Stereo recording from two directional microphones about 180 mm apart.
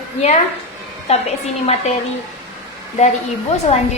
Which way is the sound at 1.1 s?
35° left (ahead or behind).